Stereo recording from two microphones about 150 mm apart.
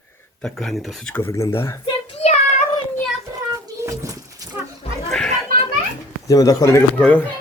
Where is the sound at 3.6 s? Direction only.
20° right (ahead or behind).